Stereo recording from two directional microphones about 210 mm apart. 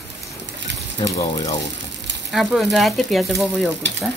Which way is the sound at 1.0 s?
15° left (ahead or behind).